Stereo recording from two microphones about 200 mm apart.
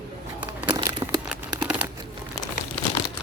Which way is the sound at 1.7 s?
10° right (ahead or behind).